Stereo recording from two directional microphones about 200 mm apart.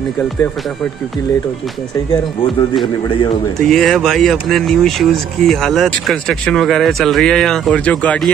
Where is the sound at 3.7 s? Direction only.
Centre (ahead or behind).